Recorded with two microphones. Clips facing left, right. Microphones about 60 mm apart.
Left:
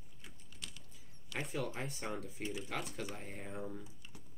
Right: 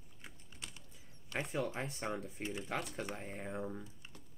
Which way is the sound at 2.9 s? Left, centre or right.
Right.